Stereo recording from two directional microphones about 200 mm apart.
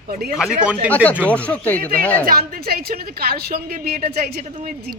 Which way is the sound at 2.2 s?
50° right (ahead or behind).